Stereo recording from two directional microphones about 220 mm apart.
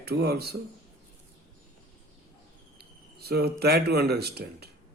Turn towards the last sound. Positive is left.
turn(degrees=-45)  # may be behind; listen again after turning